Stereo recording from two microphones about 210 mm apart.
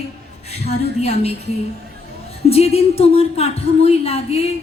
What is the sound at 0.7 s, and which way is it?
Speech, 30° left (ahead or behind).